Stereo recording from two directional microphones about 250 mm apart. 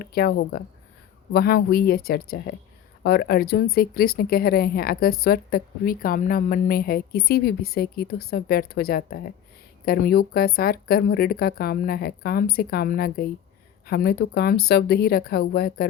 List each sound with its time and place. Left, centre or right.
0.0 s speech: left